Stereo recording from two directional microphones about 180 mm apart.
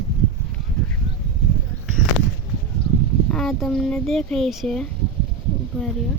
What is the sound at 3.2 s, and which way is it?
Speech, centre (ahead or behind).